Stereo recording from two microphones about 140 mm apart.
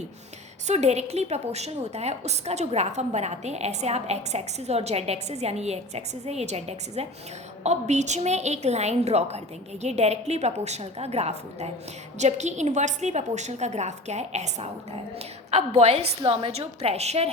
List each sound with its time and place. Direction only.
0.7 s a woman's voice: 55° right (ahead or behind)